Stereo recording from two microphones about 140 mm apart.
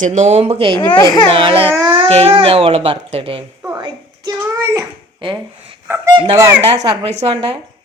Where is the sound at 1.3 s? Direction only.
40° right (ahead or behind).